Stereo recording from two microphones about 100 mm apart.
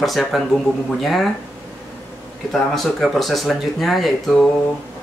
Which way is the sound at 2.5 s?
Centre (ahead or behind).